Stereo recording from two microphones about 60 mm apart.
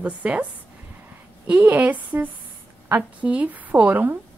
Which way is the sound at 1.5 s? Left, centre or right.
Right.